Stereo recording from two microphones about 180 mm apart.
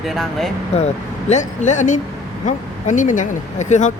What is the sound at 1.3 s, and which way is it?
Speech, 40° left (ahead or behind).